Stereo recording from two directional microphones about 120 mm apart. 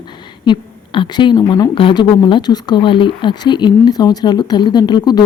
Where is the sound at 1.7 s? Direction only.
45° left (ahead or behind).